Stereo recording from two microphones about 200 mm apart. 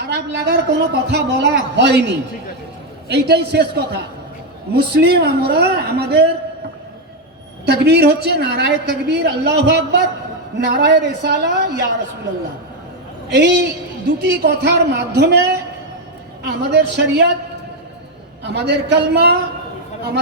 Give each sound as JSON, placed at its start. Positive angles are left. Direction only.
{"t": 0.0, "sound": "a woman's voice", "side_deg": -60}
{"t": 7.6, "sound": "a woman's voice", "side_deg": -55}
{"t": 13.3, "sound": "a woman's voice", "side_deg": -60}
{"t": 18.4, "sound": "a woman's voice", "side_deg": -55}